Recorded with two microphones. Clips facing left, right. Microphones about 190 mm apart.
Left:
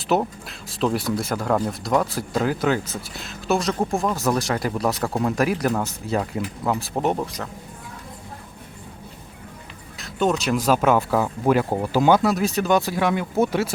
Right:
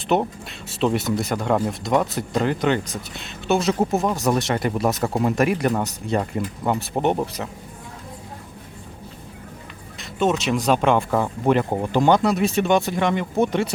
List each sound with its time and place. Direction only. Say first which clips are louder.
0.1 s speech: right 1 dB; centre (ahead or behind)
10.0 s speech: right 1 dB; centre (ahead or behind)